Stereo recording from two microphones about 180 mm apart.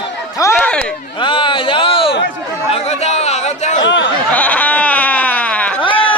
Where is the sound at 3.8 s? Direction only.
85° left.